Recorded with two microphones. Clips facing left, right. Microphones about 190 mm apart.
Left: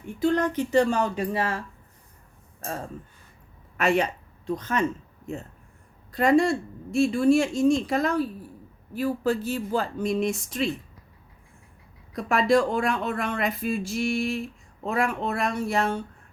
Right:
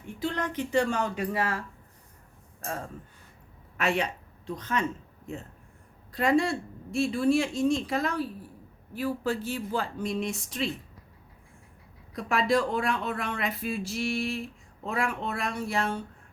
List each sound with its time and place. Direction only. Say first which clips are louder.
0.2 s speech: left 8 dB; 45° left (ahead or behind); by 1.6 s 25° left (ahead or behind)
3.8 s speech: left 5 dB; 45° left (ahead or behind)
6.1 s speech: left 4 dB; 45° left (ahead or behind)
12.1 s speech: left 4 dB; 45° left (ahead or behind)